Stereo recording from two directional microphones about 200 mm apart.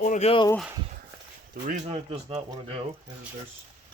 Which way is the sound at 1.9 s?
30° right (ahead or behind).